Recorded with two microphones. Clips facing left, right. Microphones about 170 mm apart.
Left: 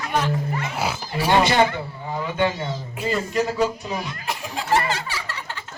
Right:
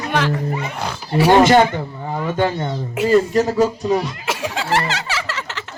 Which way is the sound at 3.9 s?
85° right.